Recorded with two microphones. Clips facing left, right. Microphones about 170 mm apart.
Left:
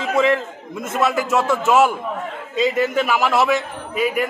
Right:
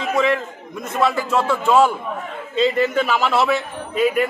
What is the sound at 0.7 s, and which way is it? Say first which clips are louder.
Speech: even; 25° left (ahead or behind).